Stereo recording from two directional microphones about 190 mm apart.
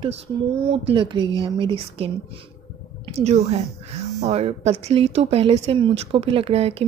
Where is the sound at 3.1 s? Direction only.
35° right (ahead or behind).